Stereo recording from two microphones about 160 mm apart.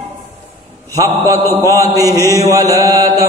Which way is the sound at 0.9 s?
20° right (ahead or behind).